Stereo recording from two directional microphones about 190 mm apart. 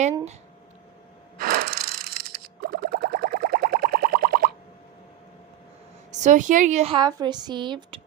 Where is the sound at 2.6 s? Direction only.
50° right (ahead or behind).